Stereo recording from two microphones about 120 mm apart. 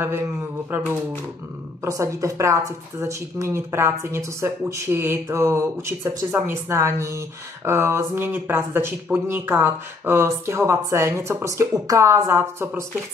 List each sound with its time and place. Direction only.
0.7 s speech: 15° right (ahead or behind)
1.8 s a woman's voice: 25° right (ahead or behind)